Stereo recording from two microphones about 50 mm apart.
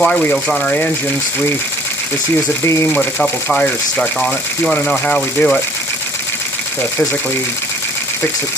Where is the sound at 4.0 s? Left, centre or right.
Centre.